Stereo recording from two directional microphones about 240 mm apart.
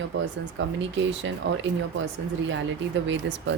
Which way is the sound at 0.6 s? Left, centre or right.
Right.